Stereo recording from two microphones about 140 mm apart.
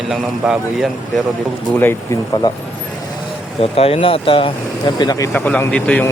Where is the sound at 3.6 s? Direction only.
45° left (ahead or behind).